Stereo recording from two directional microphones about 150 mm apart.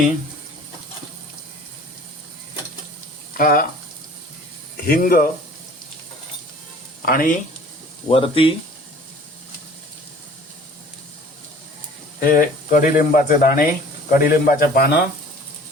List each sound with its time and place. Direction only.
3.3 s speech: 80° left
4.9 s speech: 75° left (ahead or behind)
7.0 s speech: 75° left (ahead or behind)
8.1 s speech: 40° left (ahead or behind)
12.2 s speech: 70° left (ahead or behind)